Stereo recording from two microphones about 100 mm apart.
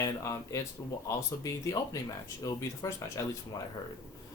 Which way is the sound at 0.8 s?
25° left (ahead or behind).